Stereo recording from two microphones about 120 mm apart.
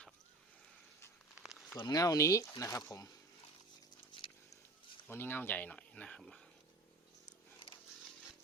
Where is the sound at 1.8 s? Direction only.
30° left (ahead or behind).